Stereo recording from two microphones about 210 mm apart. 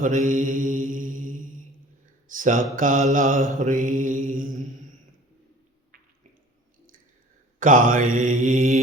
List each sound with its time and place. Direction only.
0.0 s mantra: 40° right (ahead or behind)
7.6 s mantra: 40° right (ahead or behind)